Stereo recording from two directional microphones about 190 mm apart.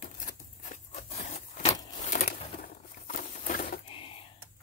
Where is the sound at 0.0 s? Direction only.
40° left (ahead or behind).